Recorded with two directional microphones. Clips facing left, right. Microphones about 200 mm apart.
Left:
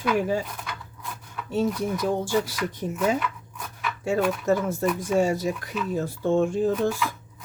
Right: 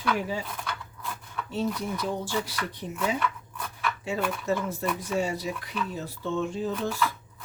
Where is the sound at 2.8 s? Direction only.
45° left (ahead or behind).